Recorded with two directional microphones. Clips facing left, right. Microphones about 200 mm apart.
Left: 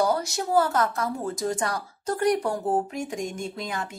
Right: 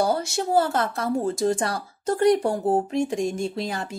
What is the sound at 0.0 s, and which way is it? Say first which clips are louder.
Speech: right 1 dB; 30° right (ahead or behind).